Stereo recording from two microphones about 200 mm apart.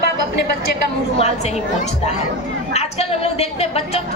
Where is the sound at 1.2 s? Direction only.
30° left (ahead or behind).